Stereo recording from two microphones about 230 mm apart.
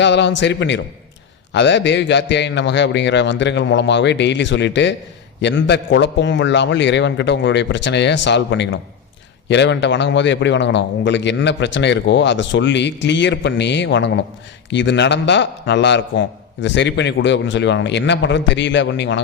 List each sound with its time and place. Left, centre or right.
0.0 s a man's voice: left